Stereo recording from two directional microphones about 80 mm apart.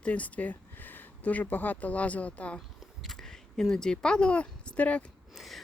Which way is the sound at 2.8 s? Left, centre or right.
Centre.